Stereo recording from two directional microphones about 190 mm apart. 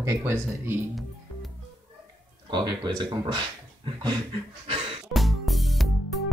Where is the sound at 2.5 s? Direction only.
25° right (ahead or behind).